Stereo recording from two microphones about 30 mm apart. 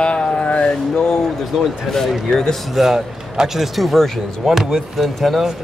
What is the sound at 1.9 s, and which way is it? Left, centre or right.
Speech, centre.